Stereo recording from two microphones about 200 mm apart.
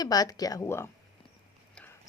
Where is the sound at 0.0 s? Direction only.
20° left (ahead or behind).